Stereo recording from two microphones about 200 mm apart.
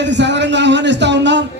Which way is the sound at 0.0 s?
60° right (ahead or behind).